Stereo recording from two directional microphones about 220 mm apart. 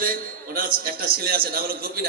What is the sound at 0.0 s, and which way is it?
A man's voice, 40° right (ahead or behind).